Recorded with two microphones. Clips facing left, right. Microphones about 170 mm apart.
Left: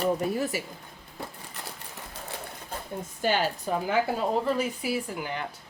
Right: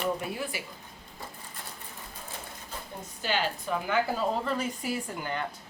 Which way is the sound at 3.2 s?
45° left (ahead or behind).